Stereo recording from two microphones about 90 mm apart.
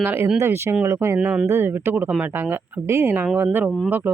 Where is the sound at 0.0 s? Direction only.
20° right (ahead or behind).